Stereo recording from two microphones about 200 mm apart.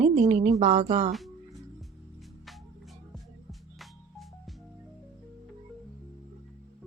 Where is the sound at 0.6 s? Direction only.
30° right (ahead or behind).